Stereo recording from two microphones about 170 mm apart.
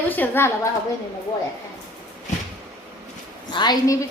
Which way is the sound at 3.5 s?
25° left (ahead or behind).